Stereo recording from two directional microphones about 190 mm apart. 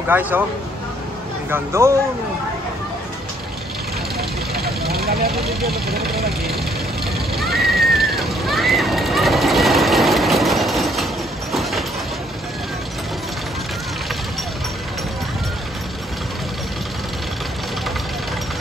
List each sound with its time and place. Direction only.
0.1 s speech: 10° right (ahead or behind)
1.5 s speech: 15° right (ahead or behind)
4.2 s vehicle: 55° right (ahead or behind)
5.9 s speech: 55° right (ahead or behind)
7.3 s a sound: centre (ahead or behind)